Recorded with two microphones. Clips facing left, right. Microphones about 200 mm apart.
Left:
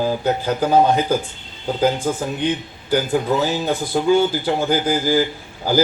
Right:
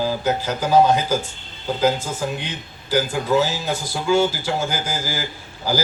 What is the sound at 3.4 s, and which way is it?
Speech, 55° left (ahead or behind).